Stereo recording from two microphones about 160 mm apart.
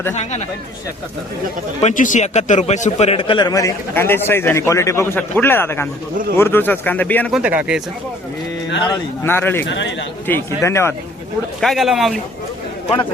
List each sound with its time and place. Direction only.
0.1 s speech: 45° left (ahead or behind)
1.8 s a man's voice: 50° left (ahead or behind); by 7.3 s 10° left (ahead or behind)
7.3 s a man's voice: 5° right (ahead or behind)
9.2 s speech: 15° left (ahead or behind)
11.6 s a man's voice: centre (ahead or behind)